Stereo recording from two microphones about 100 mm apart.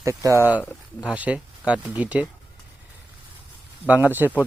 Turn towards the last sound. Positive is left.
turn(degrees=-20)  # may be behind; listen again after turning